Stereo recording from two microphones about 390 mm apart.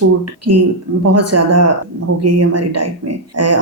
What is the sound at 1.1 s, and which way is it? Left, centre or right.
Speech, right.